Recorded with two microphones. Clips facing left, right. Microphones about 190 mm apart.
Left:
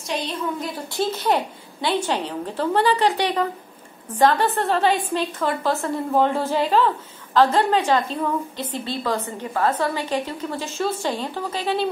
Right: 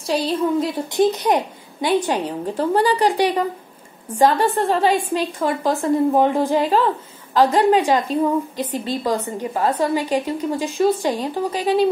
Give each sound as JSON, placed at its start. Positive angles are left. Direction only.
{"t": 0.0, "sound": "a woman's voice", "side_deg": -30}
{"t": 0.8, "sound": "a woman's voice", "side_deg": -20}